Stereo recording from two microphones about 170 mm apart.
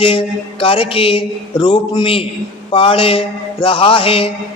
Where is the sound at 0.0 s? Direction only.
30° left (ahead or behind).